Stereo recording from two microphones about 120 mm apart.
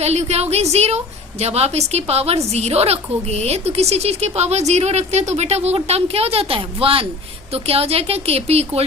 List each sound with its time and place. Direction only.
0.0 s a woman's voice: 65° right (ahead or behind)